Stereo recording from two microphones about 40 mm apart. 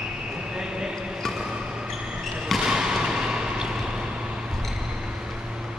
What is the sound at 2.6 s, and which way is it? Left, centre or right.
Basketball bounce, centre.